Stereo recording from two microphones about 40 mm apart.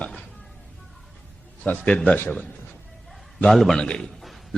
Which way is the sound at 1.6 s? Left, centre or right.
Left.